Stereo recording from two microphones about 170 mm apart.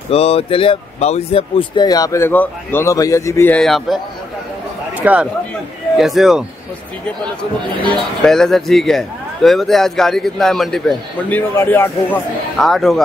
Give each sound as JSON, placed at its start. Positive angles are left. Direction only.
{"t": 0.1, "sound": "speech", "side_deg": 35}
{"t": 4.9, "sound": "a man's voice", "side_deg": -10}
{"t": 8.2, "sound": "speech", "side_deg": 5}